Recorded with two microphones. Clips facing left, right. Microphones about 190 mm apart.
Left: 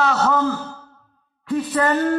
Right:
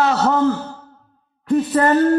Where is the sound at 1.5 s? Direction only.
45° right (ahead or behind).